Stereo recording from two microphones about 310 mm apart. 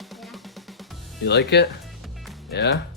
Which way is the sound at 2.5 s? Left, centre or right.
Left.